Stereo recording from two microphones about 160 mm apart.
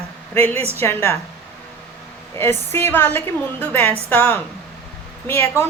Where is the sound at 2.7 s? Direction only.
15° left (ahead or behind).